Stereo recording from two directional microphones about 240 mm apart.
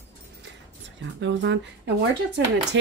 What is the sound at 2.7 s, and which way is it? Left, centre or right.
Speech, right.